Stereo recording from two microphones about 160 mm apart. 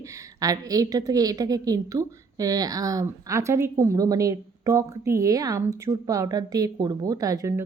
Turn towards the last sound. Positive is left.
turn(degrees=-20)  # may be behind; listen again after turning